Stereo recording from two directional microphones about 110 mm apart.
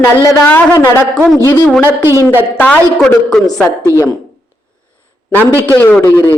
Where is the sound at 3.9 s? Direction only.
30° right (ahead or behind).